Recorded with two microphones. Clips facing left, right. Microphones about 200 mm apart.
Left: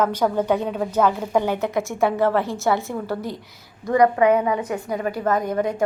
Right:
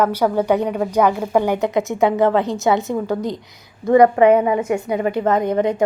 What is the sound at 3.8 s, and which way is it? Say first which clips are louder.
A woman's voice: right 5 dB; 30° right (ahead or behind).